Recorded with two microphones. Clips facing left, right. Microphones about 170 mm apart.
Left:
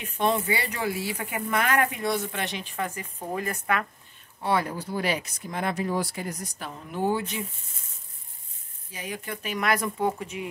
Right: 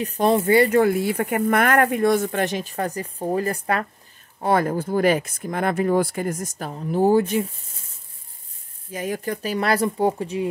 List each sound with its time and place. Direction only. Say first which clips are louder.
0.0 s speech: right 6 dB; 35° right (ahead or behind)
0.5 s speech: right 13 dB; 50° right (ahead or behind); by 3.8 s 35° right (ahead or behind)
4.4 s speech: right 6 dB; 45° right (ahead or behind)
8.9 s speech: right 9 dB; 45° right (ahead or behind)